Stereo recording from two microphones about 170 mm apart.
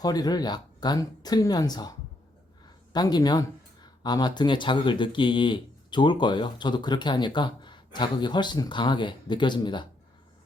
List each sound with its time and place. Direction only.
0.0 s speech: 20° left (ahead or behind)